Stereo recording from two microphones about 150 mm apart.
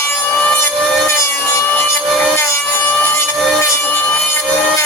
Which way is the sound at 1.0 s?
20° left (ahead or behind).